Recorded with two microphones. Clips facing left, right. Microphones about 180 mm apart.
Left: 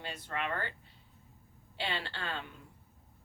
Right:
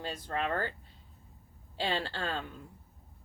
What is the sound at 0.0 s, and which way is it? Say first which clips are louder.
Speech: right 4 dB; 35° right (ahead or behind).